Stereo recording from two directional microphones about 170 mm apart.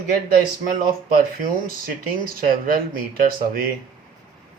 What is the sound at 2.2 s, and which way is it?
Speech, 55° right (ahead or behind).